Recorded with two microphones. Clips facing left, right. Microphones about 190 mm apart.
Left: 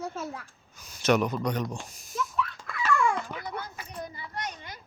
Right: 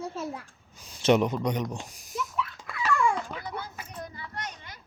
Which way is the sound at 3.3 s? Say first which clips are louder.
Even; centre (ahead or behind).